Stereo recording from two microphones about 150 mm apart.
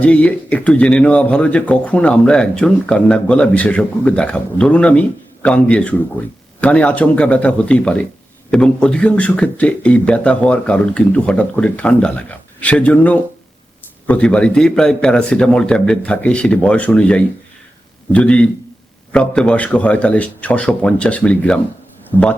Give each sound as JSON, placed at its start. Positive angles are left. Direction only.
{"t": 0.0, "sound": "speech", "side_deg": 10}
{"t": 22.1, "sound": "speech", "side_deg": 20}